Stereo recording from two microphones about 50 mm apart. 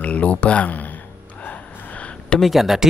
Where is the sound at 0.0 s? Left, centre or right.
Left.